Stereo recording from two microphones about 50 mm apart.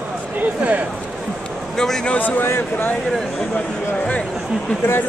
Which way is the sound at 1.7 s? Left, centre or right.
Centre.